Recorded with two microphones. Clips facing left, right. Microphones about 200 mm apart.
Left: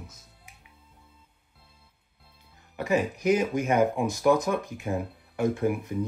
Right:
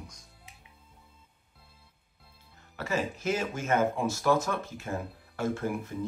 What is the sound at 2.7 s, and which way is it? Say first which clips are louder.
Speech: left 6 dB; 15° left (ahead or behind).